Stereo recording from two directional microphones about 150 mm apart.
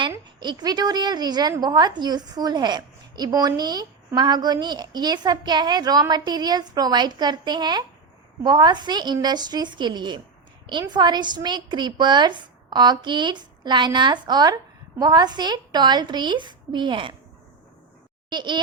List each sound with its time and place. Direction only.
0.3 s a woman's voice: 30° right (ahead or behind)
18.3 s speech: 30° right (ahead or behind)